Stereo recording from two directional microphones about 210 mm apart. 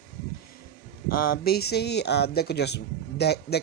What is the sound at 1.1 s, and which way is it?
Speech, 45° left (ahead or behind).